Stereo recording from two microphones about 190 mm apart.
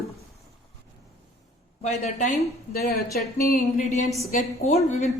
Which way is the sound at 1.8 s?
40° left (ahead or behind).